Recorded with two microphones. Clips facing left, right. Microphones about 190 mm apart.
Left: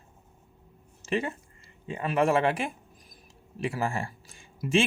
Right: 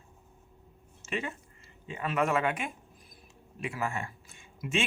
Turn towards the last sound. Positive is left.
turn(degrees=30)  # may be behind; listen again after turning